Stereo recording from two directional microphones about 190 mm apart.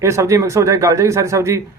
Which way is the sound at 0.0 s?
15° right (ahead or behind).